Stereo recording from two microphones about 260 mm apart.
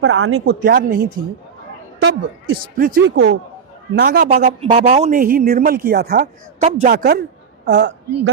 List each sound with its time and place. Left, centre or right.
0.0 s speech: right
0.6 s a woman's voice: right